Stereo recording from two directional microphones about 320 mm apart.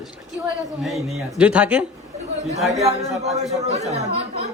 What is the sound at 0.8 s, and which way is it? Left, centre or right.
A man's voice, centre.